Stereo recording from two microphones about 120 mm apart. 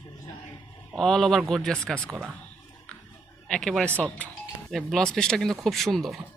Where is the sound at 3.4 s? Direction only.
5° left (ahead or behind).